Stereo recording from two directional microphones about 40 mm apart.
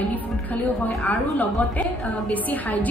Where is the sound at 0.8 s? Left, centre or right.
Left.